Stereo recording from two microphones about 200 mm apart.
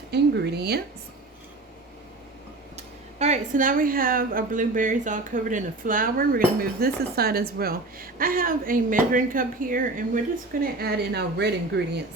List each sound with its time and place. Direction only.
0.1 s a woman's voice: 55° right (ahead or behind)
2.7 s a woman's voice: 35° right (ahead or behind); by 11.8 s 55° right (ahead or behind)